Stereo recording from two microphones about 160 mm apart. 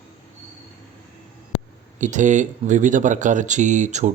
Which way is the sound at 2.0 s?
50° right (ahead or behind).